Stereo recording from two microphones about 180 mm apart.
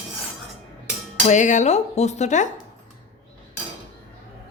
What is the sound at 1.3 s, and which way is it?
A woman's voice, 40° left (ahead or behind).